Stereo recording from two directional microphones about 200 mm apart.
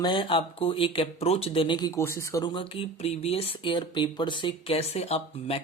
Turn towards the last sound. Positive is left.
turn(degrees=30)  # may be behind; listen again after turning